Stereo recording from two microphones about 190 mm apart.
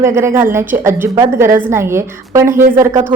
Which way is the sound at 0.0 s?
15° right (ahead or behind).